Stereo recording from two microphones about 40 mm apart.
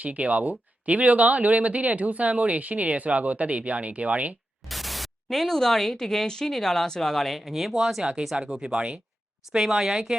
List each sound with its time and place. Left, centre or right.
0.0 s speech: right
4.7 s speech: centre